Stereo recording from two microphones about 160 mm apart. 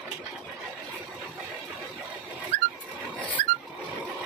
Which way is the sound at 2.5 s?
50° right (ahead or behind).